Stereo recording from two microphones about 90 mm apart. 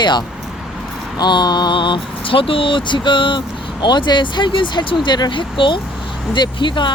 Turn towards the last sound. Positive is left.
turn(degrees=60)  # may be behind; listen again after turning